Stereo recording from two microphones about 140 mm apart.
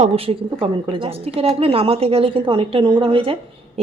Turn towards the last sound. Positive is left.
turn(degrees=-40)  # may be behind; listen again after turning